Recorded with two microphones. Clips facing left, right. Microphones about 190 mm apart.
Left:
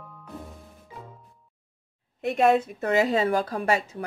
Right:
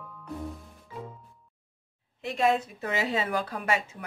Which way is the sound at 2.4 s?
55° left (ahead or behind).